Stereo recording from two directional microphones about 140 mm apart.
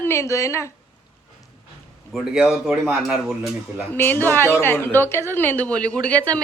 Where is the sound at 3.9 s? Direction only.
15° left (ahead or behind).